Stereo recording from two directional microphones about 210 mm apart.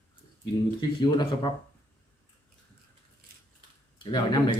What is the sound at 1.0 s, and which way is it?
Speech, 20° left (ahead or behind).